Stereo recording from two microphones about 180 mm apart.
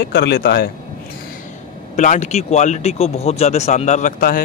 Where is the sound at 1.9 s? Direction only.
45° left (ahead or behind).